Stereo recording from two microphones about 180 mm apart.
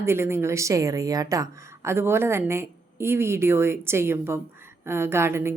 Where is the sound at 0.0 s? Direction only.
15° right (ahead or behind).